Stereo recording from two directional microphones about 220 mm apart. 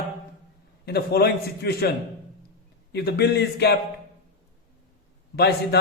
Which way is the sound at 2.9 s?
50° left (ahead or behind).